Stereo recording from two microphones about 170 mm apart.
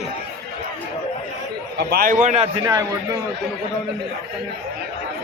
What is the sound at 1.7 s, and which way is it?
Speech, 60° right (ahead or behind).